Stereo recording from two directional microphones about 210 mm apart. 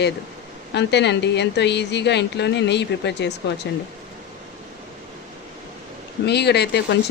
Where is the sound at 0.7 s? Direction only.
55° left (ahead or behind).